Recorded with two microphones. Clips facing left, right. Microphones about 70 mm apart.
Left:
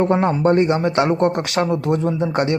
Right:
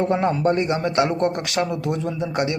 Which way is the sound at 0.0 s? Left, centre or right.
Left.